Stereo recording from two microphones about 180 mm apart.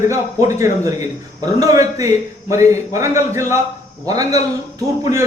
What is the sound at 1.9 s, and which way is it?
Speech, 15° right (ahead or behind).